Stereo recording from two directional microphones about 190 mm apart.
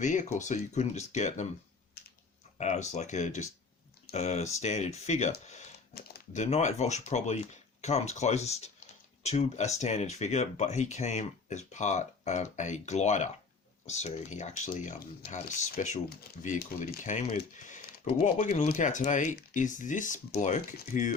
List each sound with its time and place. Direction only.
0.0 s speech: 40° left (ahead or behind)
2.0 s typing: 55° left (ahead or behind)
2.6 s speech: 35° left (ahead or behind)
5.9 s typing: 55° left (ahead or behind)
6.3 s speech: 40° left (ahead or behind)
17.6 s typing: 40° left (ahead or behind)
18.3 s speech: 40° left (ahead or behind)